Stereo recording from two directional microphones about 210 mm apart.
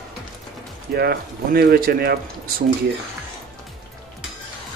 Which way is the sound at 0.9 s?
50° right (ahead or behind).